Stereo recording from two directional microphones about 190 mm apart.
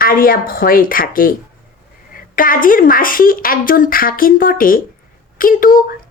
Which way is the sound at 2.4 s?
45° left (ahead or behind).